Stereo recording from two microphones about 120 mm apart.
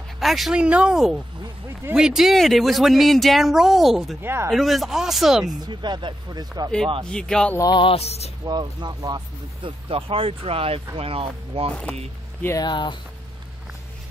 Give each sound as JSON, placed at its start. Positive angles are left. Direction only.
{"t": 0.2, "sound": "speech", "side_deg": 0}
{"t": 4.2, "sound": "speech", "side_deg": -20}
{"t": 4.5, "sound": "speech", "side_deg": 0}
{"t": 5.7, "sound": "speech", "side_deg": -40}
{"t": 7.1, "sound": "speech", "side_deg": 5}
{"t": 7.5, "sound": "speech", "side_deg": 30}
{"t": 7.8, "sound": "speech", "side_deg": 55}
{"t": 8.5, "sound": "speech", "side_deg": -35}
{"t": 9.8, "sound": "speech", "side_deg": -50}
{"t": 12.5, "sound": "speech", "side_deg": 40}